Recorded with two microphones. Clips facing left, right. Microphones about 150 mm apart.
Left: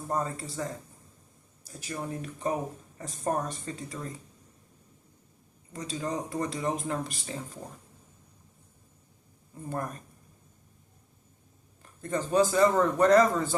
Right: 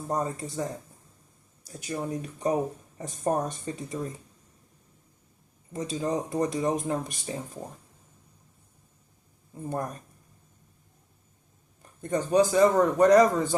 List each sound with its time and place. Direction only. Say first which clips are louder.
0.1 s speech: right 2 dB; 20° right (ahead or behind)
1.7 s speech: right 4 dB; 20° right (ahead or behind)
5.7 s speech: right 4 dB; 20° right (ahead or behind)
12.1 s a man's voice: right 3 dB; 15° right (ahead or behind)